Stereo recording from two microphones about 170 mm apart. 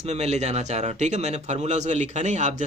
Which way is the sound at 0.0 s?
40° right (ahead or behind).